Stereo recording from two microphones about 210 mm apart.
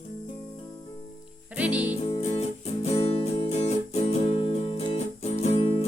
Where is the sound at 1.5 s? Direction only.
5° right (ahead or behind).